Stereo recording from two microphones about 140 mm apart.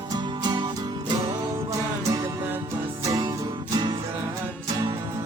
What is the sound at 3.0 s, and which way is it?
Music, 25° right (ahead or behind).